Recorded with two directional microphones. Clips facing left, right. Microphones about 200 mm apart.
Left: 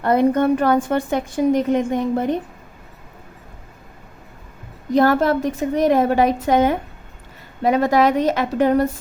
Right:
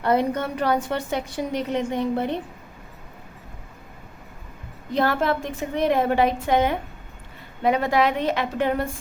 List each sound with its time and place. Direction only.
0.0 s a woman's voice: 50° left (ahead or behind)
4.9 s a woman's voice: 45° left (ahead or behind)